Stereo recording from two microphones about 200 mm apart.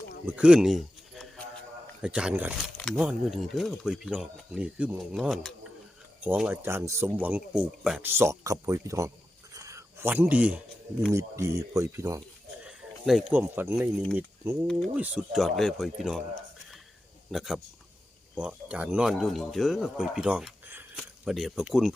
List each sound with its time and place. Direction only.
0.3 s speech: 5° right (ahead or behind)
12.6 s speech: 5° right (ahead or behind)
17.3 s speech: centre (ahead or behind)